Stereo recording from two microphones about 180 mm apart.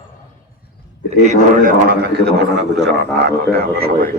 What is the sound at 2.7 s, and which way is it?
A man's voice, 70° right (ahead or behind).